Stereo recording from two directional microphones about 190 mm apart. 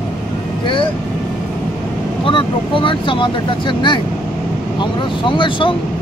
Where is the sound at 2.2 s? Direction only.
25° left (ahead or behind).